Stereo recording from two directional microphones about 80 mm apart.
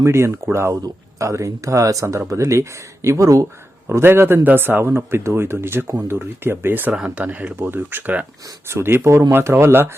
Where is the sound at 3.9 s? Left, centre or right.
Right.